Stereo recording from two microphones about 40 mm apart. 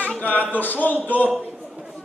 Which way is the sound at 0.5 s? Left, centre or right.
Left.